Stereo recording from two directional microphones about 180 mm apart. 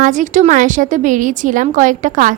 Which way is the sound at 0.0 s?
45° right (ahead or behind).